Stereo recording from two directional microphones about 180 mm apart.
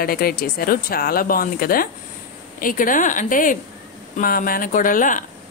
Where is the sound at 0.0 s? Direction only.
55° left (ahead or behind).